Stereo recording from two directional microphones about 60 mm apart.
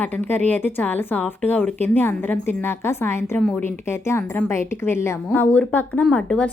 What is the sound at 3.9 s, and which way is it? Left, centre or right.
Speech, left.